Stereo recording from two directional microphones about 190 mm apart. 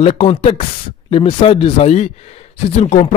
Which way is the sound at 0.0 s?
35° left (ahead or behind).